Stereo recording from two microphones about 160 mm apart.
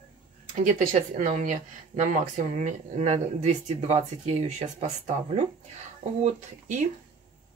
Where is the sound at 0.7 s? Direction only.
50° right (ahead or behind).